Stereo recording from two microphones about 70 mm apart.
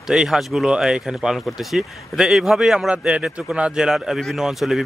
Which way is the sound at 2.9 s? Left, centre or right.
Centre.